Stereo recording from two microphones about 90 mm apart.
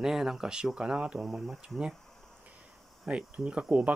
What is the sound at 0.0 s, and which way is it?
Speech, 5° right (ahead or behind).